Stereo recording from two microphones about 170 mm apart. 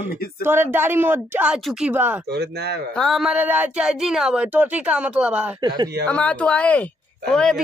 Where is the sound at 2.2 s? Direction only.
70° right (ahead or behind).